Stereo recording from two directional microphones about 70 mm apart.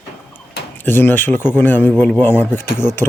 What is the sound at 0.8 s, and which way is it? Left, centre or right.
Speech, left.